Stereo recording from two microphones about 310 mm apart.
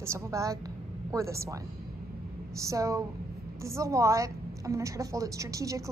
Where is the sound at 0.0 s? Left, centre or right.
Centre.